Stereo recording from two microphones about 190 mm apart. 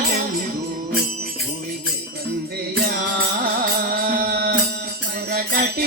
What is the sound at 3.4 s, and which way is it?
Music, 50° right (ahead or behind).